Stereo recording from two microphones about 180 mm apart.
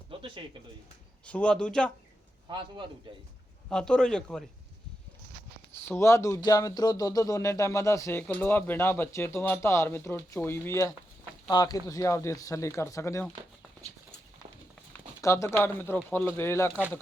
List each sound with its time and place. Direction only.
0.1 s bird: 30° right (ahead or behind)
1.2 s a man's voice: 5° left (ahead or behind)
2.5 s a man's voice: 25° right (ahead or behind)
3.7 s a man's voice: 5° left (ahead or behind)
5.7 s speech: 15° left (ahead or behind)
14.9 s speech: 15° left (ahead or behind)